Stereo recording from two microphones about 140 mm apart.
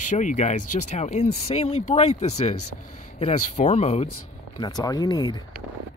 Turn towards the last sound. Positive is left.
turn(degrees=30)  # may be behind; listen again after turning